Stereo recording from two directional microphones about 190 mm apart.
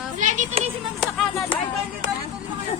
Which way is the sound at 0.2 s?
40° right (ahead or behind).